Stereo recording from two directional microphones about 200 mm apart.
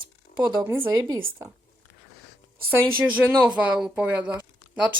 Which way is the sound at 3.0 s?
5° right (ahead or behind).